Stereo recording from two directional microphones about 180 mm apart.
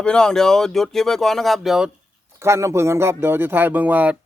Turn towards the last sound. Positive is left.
turn(degrees=-10)  # may be behind; listen again after turning